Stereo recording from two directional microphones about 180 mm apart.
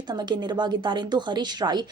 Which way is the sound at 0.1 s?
25° right (ahead or behind).